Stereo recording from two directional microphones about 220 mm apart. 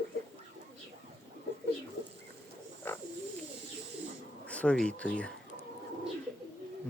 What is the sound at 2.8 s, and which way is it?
Frog, 10° left (ahead or behind).